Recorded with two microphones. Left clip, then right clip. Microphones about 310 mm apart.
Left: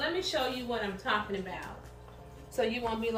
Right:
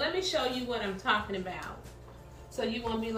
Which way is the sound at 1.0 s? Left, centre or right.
Centre.